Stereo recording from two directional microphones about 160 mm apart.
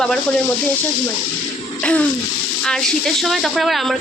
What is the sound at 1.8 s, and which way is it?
Bathtub, 5° left (ahead or behind).